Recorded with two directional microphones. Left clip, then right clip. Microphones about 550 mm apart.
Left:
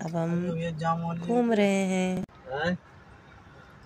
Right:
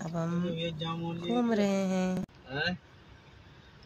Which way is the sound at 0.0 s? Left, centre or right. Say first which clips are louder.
Left 4 dB; centre.